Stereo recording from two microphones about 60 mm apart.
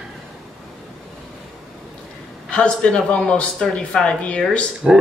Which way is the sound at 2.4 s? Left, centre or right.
Centre.